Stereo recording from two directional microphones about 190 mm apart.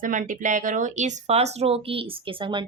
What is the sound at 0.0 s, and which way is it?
Speech, 45° right (ahead or behind).